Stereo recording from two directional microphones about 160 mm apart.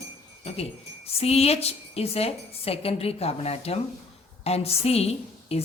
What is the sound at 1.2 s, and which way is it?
A woman's voice, 40° left (ahead or behind).